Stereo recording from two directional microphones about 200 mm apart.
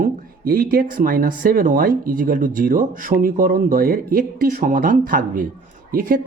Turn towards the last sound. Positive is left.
turn(degrees=-45)  # may be behind; listen again after turning